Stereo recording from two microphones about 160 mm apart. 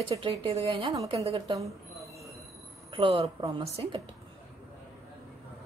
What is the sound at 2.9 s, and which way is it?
A woman's voice, 35° right (ahead or behind).